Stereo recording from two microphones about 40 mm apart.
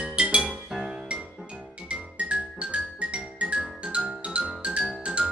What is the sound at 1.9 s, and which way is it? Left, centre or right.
Music, right.